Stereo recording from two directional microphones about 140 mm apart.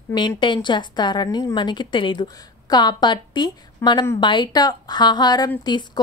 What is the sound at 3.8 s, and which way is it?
Speech, 15° left (ahead or behind).